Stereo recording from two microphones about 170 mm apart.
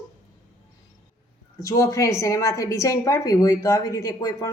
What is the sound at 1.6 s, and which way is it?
A woman's voice, 20° left (ahead or behind).